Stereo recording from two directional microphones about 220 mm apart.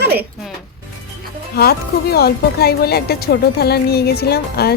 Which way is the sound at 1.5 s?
45° left (ahead or behind).